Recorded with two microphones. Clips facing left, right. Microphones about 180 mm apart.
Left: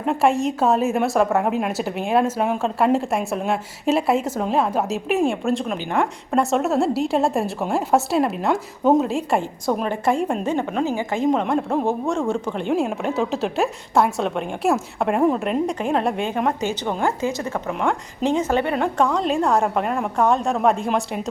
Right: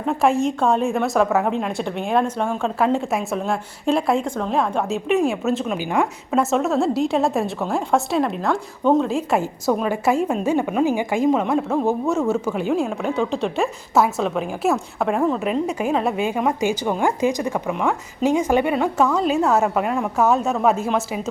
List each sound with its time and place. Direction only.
0.0 s a woman's voice: centre (ahead or behind)
8.4 s speech: 15° left (ahead or behind)
9.0 s a woman's voice: centre (ahead or behind)
17.7 s a woman's voice: centre (ahead or behind)